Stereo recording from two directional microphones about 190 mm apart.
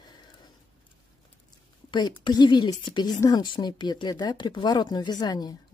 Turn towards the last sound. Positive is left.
turn(degrees=20)  # may be behind; listen again after turning